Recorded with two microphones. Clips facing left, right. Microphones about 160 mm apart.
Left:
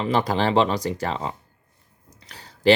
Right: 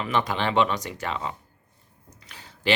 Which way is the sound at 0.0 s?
35° left (ahead or behind).